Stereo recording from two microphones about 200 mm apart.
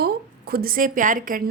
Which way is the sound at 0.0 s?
50° right (ahead or behind).